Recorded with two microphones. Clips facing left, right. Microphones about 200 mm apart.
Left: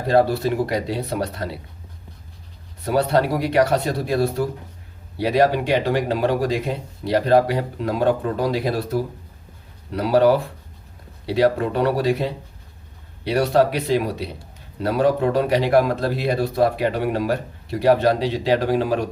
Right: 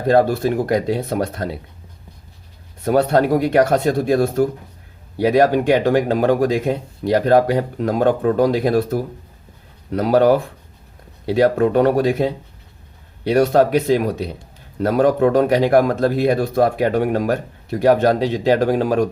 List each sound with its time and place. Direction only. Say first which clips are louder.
0.1 s speech: right 3 dB; 50° right (ahead or behind)
2.8 s speech: right 4 dB; 50° right (ahead or behind)